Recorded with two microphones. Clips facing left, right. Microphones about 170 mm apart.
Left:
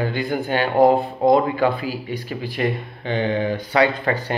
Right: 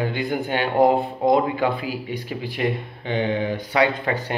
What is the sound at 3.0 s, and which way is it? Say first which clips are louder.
Speech: left 2 dB; 15° right (ahead or behind).